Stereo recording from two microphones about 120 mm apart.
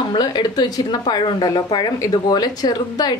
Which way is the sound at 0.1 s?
40° left (ahead or behind).